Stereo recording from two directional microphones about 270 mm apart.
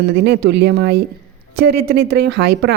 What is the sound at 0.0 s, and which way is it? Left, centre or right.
A woman's voice, right.